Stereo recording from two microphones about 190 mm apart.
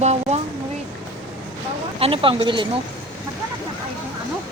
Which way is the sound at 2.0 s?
30° right (ahead or behind).